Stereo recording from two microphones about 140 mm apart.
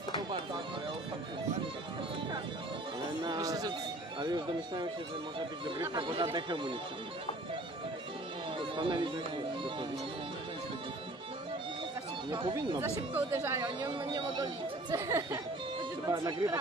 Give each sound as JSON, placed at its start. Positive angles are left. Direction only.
{"t": 3.2, "sound": "speech", "side_deg": -30}
{"t": 5.9, "sound": "speech", "side_deg": -35}
{"t": 8.5, "sound": "run", "side_deg": -35}
{"t": 12.3, "sound": "speech", "side_deg": -35}
{"t": 13.1, "sound": "speech", "side_deg": -15}
{"t": 13.6, "sound": "speech", "side_deg": -30}
{"t": 15.0, "sound": "speech", "side_deg": -20}